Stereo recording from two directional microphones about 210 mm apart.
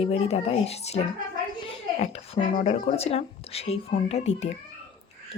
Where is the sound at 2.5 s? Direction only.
30° left (ahead or behind).